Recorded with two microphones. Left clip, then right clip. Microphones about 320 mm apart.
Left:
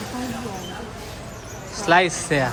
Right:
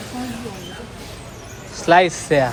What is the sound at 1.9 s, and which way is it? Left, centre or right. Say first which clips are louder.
Speech: right 4 dB; centre.